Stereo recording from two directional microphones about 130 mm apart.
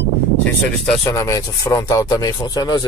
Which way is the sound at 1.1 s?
25° left (ahead or behind).